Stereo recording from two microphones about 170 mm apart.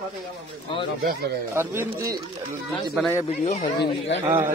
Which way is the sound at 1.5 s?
15° right (ahead or behind).